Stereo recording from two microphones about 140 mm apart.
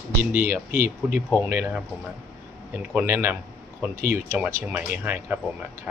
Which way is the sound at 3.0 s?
15° right (ahead or behind).